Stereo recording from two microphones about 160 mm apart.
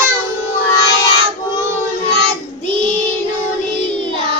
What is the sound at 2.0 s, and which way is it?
Child singing, 40° right (ahead or behind).